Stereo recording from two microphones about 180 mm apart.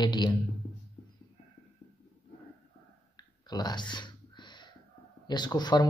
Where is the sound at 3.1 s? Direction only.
25° left (ahead or behind).